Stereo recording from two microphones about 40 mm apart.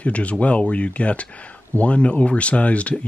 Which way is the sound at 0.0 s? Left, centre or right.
Left.